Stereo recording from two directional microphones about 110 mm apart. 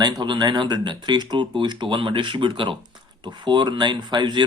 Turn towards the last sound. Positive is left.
turn(degrees=-45)  # may be behind; listen again after turning